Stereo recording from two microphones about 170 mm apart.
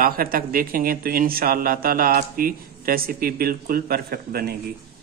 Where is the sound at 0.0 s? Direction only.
60° right (ahead or behind).